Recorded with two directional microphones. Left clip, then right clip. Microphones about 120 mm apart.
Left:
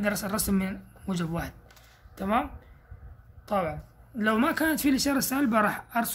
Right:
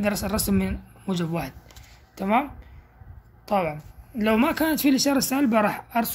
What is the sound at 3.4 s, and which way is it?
Speech, 20° right (ahead or behind).